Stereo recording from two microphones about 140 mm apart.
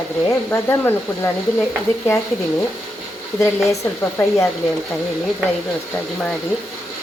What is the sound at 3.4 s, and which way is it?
Speech, 20° left (ahead or behind).